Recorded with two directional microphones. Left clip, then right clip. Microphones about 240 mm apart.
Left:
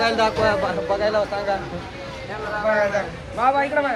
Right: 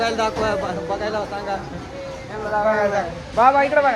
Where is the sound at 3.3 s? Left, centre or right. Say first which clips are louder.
Right 4 dB; right.